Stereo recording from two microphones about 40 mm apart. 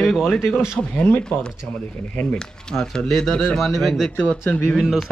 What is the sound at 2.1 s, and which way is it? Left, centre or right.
Speech, left.